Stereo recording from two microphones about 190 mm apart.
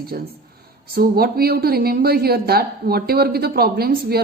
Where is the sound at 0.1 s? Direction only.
50° right (ahead or behind).